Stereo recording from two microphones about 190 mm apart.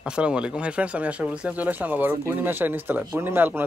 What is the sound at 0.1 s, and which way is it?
A man's voice, 5° right (ahead or behind).